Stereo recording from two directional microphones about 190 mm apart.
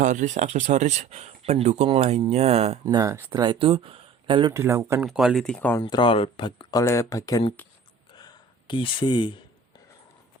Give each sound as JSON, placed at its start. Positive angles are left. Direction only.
{"t": 0.0, "sound": "speech", "side_deg": -40}
{"t": 2.8, "sound": "speech", "side_deg": -20}
{"t": 4.6, "sound": "speech", "side_deg": -15}
{"t": 5.0, "sound": "speech", "side_deg": 0}
{"t": 5.8, "sound": "speech", "side_deg": 25}
{"t": 8.1, "sound": "a sound", "side_deg": 25}